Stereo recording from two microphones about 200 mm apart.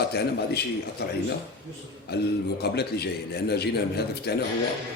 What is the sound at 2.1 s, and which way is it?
A man's voice, 55° left (ahead or behind).